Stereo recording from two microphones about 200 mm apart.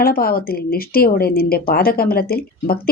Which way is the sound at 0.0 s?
50° left (ahead or behind).